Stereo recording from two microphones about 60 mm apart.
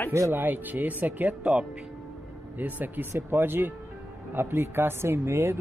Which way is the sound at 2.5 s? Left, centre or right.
Right.